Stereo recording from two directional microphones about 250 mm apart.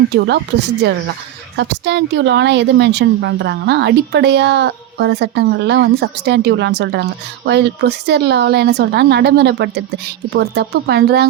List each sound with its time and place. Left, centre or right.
0.8 s a woman's voice: right